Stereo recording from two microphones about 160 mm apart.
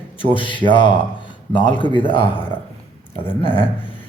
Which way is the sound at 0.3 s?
30° left (ahead or behind).